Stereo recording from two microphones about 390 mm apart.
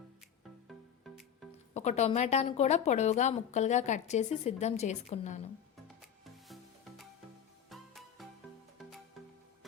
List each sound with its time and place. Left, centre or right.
1.7 s a woman's voice: centre
7.7 s music: centre